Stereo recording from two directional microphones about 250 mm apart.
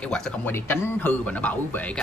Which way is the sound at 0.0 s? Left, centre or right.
Centre.